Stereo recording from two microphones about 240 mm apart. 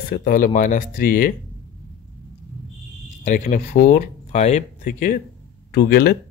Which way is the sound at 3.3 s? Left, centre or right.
Left.